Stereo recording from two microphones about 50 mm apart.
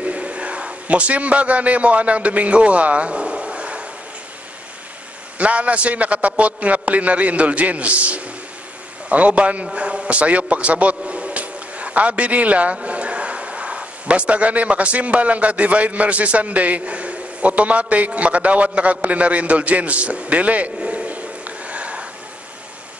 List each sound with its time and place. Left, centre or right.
0.0 s a man's voice: right
5.4 s a man's voice: right